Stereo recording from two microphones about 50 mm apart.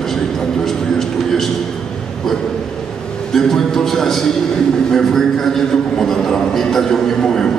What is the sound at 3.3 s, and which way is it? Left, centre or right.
A man's voice, centre.